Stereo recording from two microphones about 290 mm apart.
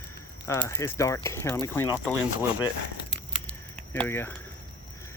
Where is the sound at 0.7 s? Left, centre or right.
Centre.